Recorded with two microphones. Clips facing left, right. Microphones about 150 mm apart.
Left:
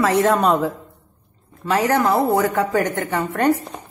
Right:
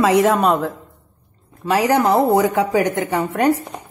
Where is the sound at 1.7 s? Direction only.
10° right (ahead or behind).